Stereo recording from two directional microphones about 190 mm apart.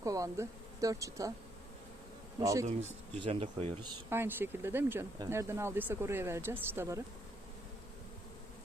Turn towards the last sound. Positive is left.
turn(degrees=-15)  # may be behind; listen again after turning